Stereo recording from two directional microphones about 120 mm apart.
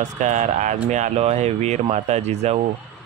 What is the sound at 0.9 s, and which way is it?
Speech, 70° right (ahead or behind).